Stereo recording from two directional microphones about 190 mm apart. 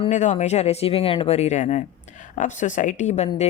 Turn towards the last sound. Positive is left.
turn(degrees=35)  # may be behind; listen again after turning